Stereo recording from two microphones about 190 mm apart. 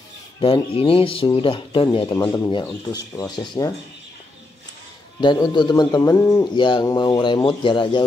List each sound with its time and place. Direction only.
0.4 s a man's voice: 30° left (ahead or behind)
5.2 s a man's voice: 25° left (ahead or behind)